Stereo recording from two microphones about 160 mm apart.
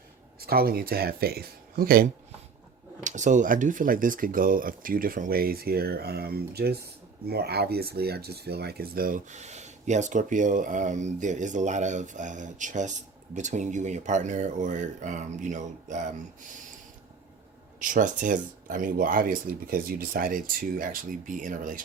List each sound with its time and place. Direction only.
0.3 s speech: 70° right (ahead or behind)
3.0 s speech: 50° right (ahead or behind)
17.7 s speech: 55° right (ahead or behind)